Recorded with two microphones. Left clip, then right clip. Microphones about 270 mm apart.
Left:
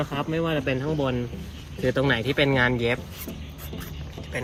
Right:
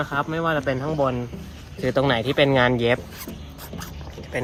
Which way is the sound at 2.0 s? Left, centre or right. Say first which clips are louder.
Right 4 dB; right.